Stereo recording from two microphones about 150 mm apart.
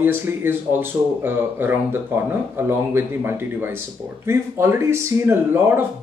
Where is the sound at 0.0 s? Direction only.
15° right (ahead or behind).